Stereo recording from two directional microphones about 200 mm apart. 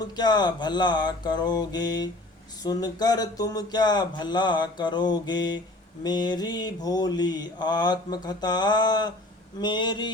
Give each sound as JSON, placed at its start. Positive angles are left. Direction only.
{"t": 0.0, "sound": "mantra", "side_deg": 20}